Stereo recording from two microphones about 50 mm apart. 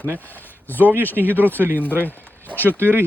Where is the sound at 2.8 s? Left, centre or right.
Right.